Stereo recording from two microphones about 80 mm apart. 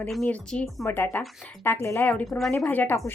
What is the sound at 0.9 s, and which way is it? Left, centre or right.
A woman's voice, left.